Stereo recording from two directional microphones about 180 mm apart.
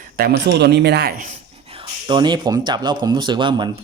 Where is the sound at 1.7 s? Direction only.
25° right (ahead or behind).